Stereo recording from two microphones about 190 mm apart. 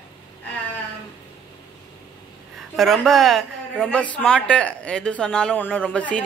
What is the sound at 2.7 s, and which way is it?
Speech, centre (ahead or behind).